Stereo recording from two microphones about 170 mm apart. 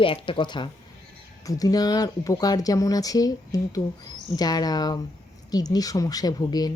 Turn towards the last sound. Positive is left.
turn(degrees=20)  # may be behind; listen again after turning